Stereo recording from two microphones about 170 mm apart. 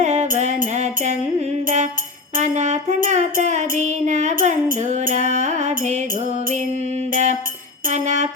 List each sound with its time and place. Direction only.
0.0 s music: 45° right (ahead or behind)
7.1 s music: 45° right (ahead or behind)